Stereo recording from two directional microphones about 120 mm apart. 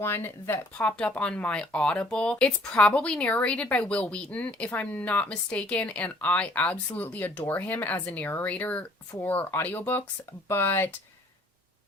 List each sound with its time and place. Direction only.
0.0 s speech: 20° left (ahead or behind)